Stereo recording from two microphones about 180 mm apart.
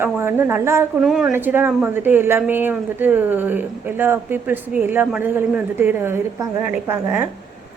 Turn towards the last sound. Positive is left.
turn(degrees=-10)  # may be behind; listen again after turning